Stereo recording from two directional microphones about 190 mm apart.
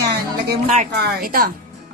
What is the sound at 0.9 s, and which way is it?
Speech, 50° right (ahead or behind).